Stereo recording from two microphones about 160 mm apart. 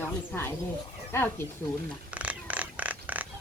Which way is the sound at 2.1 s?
10° right (ahead or behind).